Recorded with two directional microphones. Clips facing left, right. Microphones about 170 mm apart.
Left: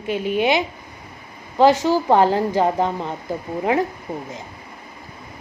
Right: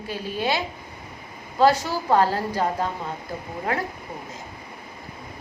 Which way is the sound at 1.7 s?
90° left.